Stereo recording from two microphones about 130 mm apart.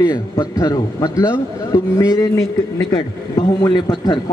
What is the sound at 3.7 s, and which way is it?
Speech, 35° left (ahead or behind).